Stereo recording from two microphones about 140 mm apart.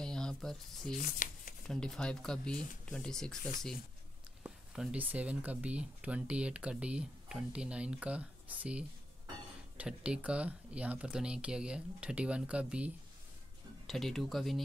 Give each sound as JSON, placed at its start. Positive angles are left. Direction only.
{"t": 0.0, "sound": "a sound", "side_deg": 5}
{"t": 0.9, "sound": "speech", "side_deg": 70}
{"t": 1.7, "sound": "speech", "side_deg": 5}
{"t": 4.4, "sound": "speech", "side_deg": -10}